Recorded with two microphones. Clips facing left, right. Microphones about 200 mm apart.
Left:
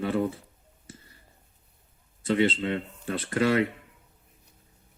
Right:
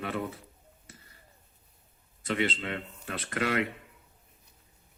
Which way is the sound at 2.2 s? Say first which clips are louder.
Left 6 dB; 30° left (ahead or behind).